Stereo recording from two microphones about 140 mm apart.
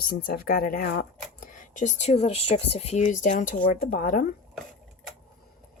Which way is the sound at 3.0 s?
65° left (ahead or behind).